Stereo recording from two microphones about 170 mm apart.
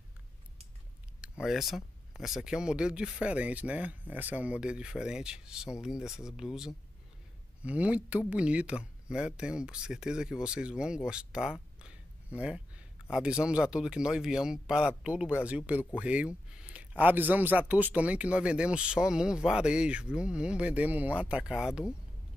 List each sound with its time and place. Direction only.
1.4 s speech: centre (ahead or behind)